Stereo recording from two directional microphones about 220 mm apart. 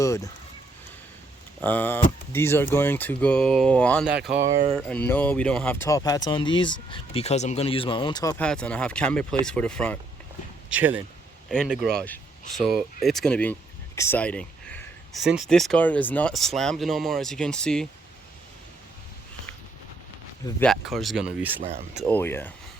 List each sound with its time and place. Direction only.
0.0 s speech: 15° left (ahead or behind)
1.6 s speech: 10° left (ahead or behind)
4.4 s speech: 20° right (ahead or behind)
4.7 s speech: 5° left (ahead or behind)
8.4 s speech: 5° left (ahead or behind)
10.7 s speech: 5° right (ahead or behind)
20.6 s speech: centre (ahead or behind)
21.6 s speech: 35° right (ahead or behind)
22.0 s speech: 10° left (ahead or behind)